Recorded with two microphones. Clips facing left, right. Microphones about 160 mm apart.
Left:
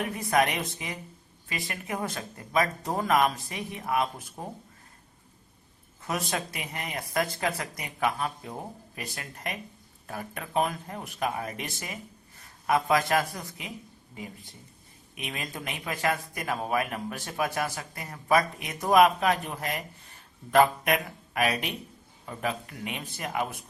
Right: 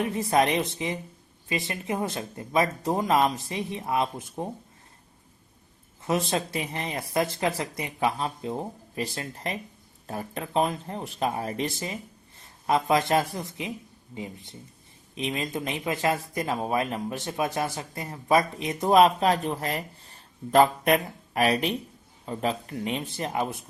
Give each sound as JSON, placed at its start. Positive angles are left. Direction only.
{"t": 0.0, "sound": "speech", "side_deg": -25}
{"t": 6.0, "sound": "speech", "side_deg": -25}
{"t": 15.1, "sound": "speech", "side_deg": -25}